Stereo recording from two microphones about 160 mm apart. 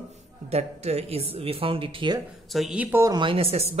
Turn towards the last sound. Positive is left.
turn(degrees=-40)  # may be behind; listen again after turning